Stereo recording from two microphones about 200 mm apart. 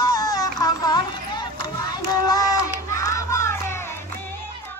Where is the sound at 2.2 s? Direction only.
20° left (ahead or behind).